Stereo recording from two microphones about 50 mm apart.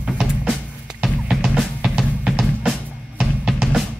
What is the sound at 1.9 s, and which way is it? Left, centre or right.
Drum, right.